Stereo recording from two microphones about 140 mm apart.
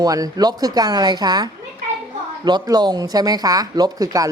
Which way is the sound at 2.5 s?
30° right (ahead or behind).